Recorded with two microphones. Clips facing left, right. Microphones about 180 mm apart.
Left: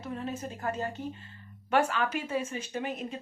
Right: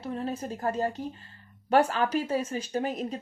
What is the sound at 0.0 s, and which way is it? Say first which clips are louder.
Speech: right 3 dB; 35° right (ahead or behind).